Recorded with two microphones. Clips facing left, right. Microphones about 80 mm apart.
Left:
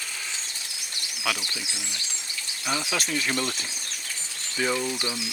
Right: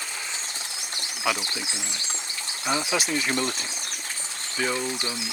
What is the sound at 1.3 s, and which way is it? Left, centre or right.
Speech, right.